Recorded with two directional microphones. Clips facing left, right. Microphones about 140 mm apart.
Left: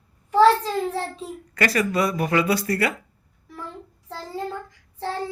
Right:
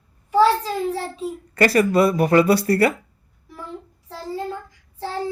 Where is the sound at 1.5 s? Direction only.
35° right (ahead or behind).